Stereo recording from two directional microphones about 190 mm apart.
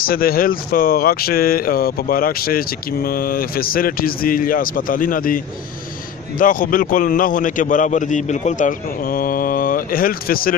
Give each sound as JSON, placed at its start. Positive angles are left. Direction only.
{"t": 0.0, "sound": "speech", "side_deg": 50}